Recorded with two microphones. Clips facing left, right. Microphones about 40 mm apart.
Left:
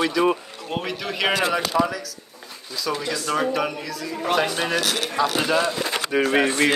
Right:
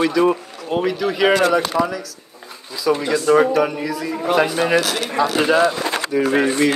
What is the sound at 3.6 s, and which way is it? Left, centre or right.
Speech, centre.